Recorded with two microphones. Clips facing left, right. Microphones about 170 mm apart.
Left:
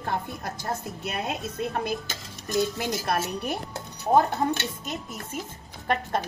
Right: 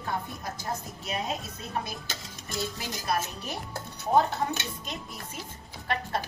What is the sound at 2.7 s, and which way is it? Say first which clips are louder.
Speech: left 4 dB; 55° left (ahead or behind).